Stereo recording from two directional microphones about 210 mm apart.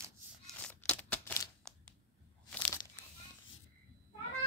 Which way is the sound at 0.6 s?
5° left (ahead or behind).